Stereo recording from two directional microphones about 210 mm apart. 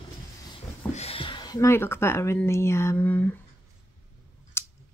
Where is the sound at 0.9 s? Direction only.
25° left (ahead or behind); by 3.3 s 10° left (ahead or behind).